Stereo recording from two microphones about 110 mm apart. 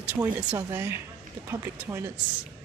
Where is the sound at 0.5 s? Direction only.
25° right (ahead or behind).